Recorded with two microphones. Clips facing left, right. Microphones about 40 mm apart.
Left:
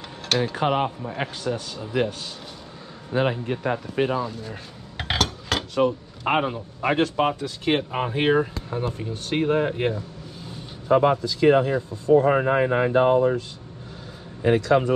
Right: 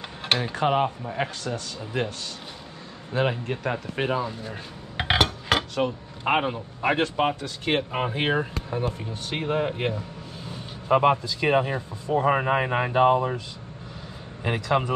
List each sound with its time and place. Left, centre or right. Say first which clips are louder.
0.6 s speech: even; centre
3.1 s speech: left 2 dB; centre
3.7 s dishes: left 3 dB; centre
5.6 s speech: left 4 dB; centre
10.9 s speech: left 1 dB; right
14.4 s speech: left 5 dB; right